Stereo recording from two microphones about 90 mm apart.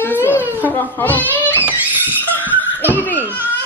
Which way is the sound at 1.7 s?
20° right (ahead or behind).